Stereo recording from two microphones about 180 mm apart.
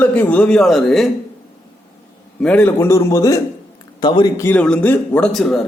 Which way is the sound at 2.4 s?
10° left (ahead or behind).